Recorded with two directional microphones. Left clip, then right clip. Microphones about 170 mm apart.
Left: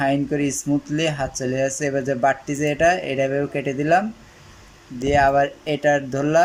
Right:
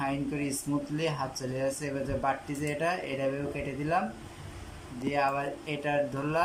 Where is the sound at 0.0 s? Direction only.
60° left (ahead or behind).